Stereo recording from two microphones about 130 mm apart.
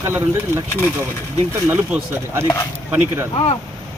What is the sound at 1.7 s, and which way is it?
Speech, 20° right (ahead or behind).